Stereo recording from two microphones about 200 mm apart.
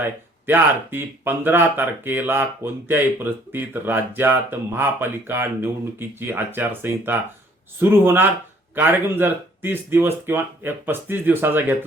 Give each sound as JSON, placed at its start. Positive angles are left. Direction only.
{"t": 0.0, "sound": "speech", "side_deg": -10}